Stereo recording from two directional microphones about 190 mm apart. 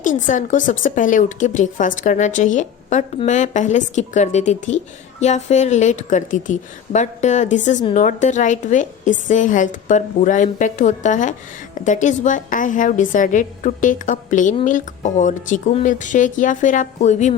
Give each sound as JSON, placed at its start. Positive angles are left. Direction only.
{"t": 0.3, "sound": "a woman's voice", "side_deg": 45}